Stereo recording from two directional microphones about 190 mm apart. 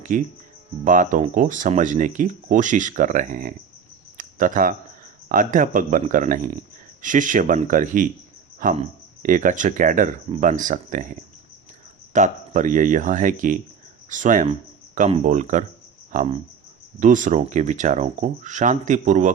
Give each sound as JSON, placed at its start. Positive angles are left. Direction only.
{"t": 0.1, "sound": "speech", "side_deg": -45}
{"t": 4.2, "sound": "a sound", "side_deg": -45}
{"t": 5.3, "sound": "speech", "side_deg": -45}
{"t": 8.5, "sound": "cricket", "side_deg": -45}
{"t": 9.2, "sound": "speech", "side_deg": -45}